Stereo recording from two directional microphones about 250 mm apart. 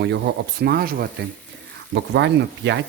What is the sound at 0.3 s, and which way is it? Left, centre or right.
Speech, right.